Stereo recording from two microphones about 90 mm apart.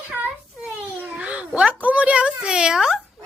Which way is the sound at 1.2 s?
15° right (ahead or behind).